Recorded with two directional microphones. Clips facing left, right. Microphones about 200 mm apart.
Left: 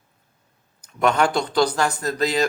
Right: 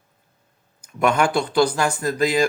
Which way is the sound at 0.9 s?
10° right (ahead or behind).